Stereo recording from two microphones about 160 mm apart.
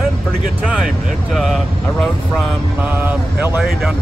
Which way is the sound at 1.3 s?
Centre (ahead or behind).